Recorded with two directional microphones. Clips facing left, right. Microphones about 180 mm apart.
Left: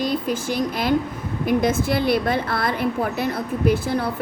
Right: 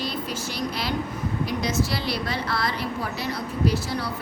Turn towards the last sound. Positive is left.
turn(degrees=50)  # may be behind; listen again after turning